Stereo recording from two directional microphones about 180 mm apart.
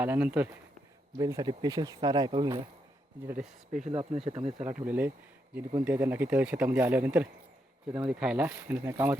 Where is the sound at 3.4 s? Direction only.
45° right (ahead or behind).